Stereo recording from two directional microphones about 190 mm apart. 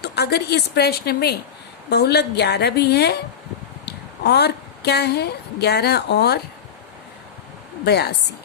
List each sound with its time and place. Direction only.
0.0 s a woman's voice: 60° left (ahead or behind)
7.9 s a woman's voice: 60° left (ahead or behind)